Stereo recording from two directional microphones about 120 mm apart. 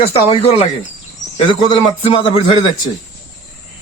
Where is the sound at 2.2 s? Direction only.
45° left (ahead or behind).